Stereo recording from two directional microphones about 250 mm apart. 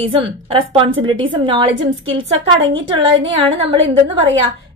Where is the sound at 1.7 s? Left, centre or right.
Right.